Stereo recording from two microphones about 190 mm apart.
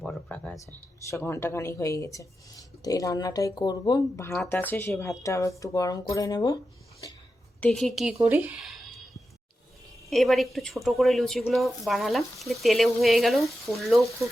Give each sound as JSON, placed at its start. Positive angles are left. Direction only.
{"t": 0.0, "sound": "speech", "side_deg": 5}
{"t": 7.6, "sound": "speech", "side_deg": 5}
{"t": 10.1, "sound": "speech", "side_deg": 0}